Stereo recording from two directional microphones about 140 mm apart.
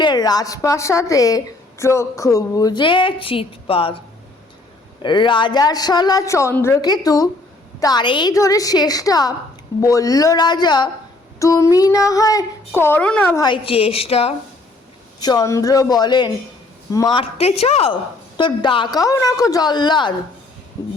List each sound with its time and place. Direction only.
0.0 s speech: 30° left (ahead or behind)
5.0 s speech: 35° left (ahead or behind); by 13.3 s 10° left (ahead or behind)
13.3 s speech: 30° left (ahead or behind)
13.7 s a woman's voice: 45° left (ahead or behind)
15.2 s speech: 30° left (ahead or behind)
17.2 s a woman's voice: 45° left (ahead or behind)
18.3 s speech: 35° left (ahead or behind)
20.8 s speech: 20° left (ahead or behind)